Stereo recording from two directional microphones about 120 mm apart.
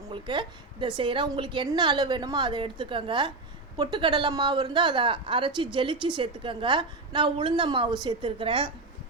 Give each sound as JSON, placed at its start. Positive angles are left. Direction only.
{"t": 0.1, "sound": "a woman's voice", "side_deg": -45}